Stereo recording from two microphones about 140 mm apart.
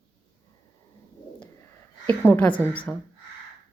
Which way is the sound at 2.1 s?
15° left (ahead or behind).